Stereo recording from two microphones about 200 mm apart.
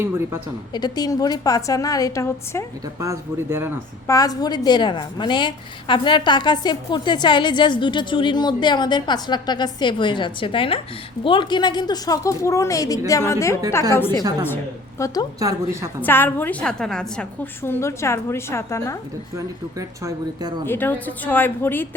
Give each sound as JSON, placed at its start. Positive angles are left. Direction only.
{"t": 0.0, "sound": "speech", "side_deg": -10}
{"t": 0.7, "sound": "a woman's voice", "side_deg": 20}
{"t": 3.0, "sound": "speech", "side_deg": -15}
{"t": 4.0, "sound": "a woman's voice", "side_deg": 15}
{"t": 14.2, "sound": "a woman's voice", "side_deg": -20}
{"t": 14.4, "sound": "a woman's voice", "side_deg": 10}
{"t": 15.4, "sound": "speech", "side_deg": -15}
{"t": 16.0, "sound": "a woman's voice", "side_deg": 10}
{"t": 20.7, "sound": "a woman's voice", "side_deg": 10}